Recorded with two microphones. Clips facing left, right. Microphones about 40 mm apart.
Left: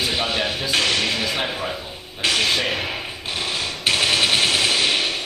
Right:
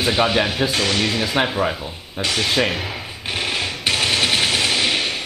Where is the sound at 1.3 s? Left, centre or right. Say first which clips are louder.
Right 5 dB; right.